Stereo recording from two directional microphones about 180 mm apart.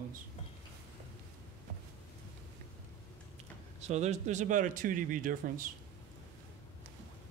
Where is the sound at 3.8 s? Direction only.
40° right (ahead or behind).